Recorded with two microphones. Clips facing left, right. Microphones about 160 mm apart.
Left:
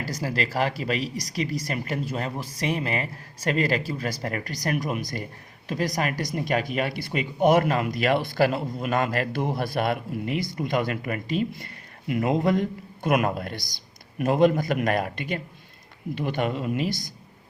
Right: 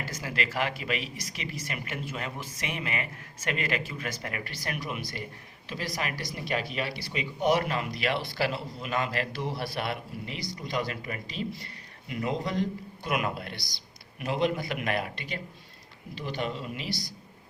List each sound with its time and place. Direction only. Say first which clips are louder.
0.0 s speech: left 5 dB; 35° left (ahead or behind)